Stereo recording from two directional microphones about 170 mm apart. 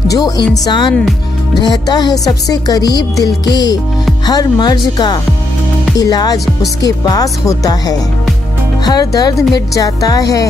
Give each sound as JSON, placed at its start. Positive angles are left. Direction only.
{"t": 0.1, "sound": "speech", "side_deg": 25}